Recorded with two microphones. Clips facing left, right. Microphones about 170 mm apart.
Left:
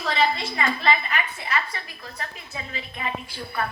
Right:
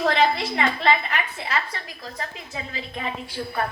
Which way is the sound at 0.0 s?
65° right (ahead or behind).